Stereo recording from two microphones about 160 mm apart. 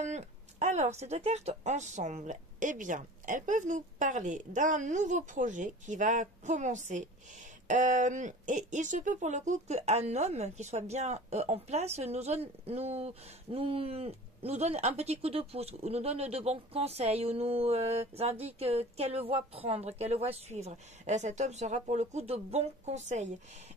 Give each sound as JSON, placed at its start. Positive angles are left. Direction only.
{"t": 0.0, "sound": "speech", "side_deg": -45}